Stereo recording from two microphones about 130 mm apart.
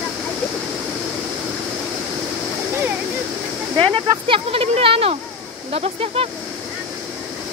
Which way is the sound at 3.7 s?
45° right (ahead or behind).